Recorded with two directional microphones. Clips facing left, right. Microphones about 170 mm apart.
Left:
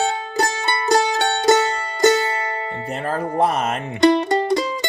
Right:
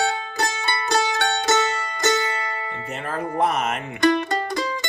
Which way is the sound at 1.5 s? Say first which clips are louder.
Left 8 dB; 15° left (ahead or behind).